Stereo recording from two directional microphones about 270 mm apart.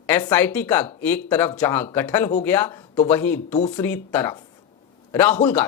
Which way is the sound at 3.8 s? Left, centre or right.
Centre.